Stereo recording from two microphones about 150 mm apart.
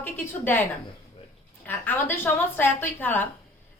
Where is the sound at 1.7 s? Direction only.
15° left (ahead or behind).